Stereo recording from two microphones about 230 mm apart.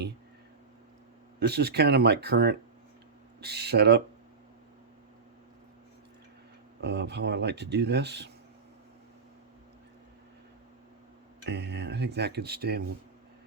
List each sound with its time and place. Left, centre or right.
1.4 s speech: right
6.8 s speech: right
11.4 s speech: right